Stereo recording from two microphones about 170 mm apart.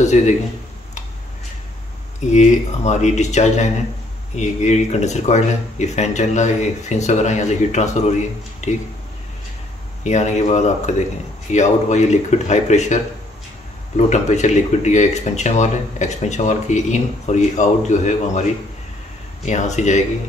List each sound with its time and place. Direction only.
0.1 s speech: 45° left (ahead or behind)
2.3 s speech: 40° left (ahead or behind)
10.0 s speech: 45° left (ahead or behind)
19.4 s speech: 45° left (ahead or behind)